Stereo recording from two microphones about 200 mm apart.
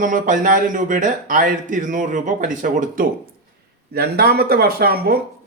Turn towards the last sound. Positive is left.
turn(degrees=-50)  # may be behind; listen again after turning